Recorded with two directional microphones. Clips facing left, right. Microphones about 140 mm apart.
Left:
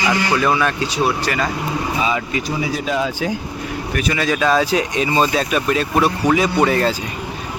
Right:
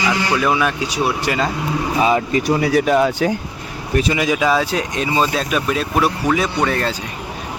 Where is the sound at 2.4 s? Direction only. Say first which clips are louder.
Right 8 dB; 65° right (ahead or behind).